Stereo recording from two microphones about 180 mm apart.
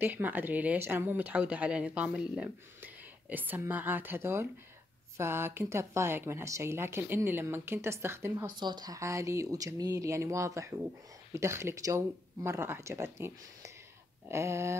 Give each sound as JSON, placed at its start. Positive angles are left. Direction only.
{"t": 0.0, "sound": "speech", "side_deg": -10}
{"t": 8.5, "sound": "speech", "side_deg": -25}